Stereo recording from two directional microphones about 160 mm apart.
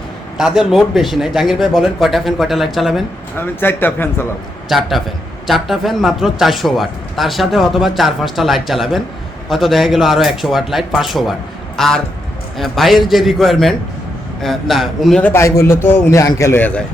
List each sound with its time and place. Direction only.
0.3 s speech: 5° right (ahead or behind)
3.3 s a man's voice: 15° left (ahead or behind)
4.7 s speech: centre (ahead or behind)
15.2 s a man's voice: 15° left (ahead or behind)